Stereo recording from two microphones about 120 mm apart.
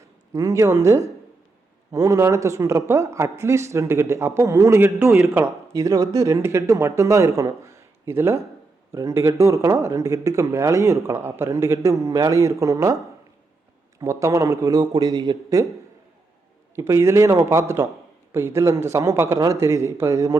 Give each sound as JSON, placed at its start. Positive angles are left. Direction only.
{"t": 0.0, "sound": "speech", "side_deg": -25}
{"t": 14.0, "sound": "speech", "side_deg": -25}
{"t": 16.7, "sound": "speech", "side_deg": -25}